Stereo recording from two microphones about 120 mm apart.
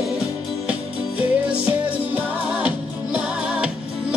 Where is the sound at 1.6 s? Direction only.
15° right (ahead or behind).